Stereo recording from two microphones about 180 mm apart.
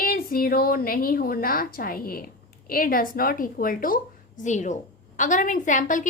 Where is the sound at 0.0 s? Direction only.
55° left (ahead or behind).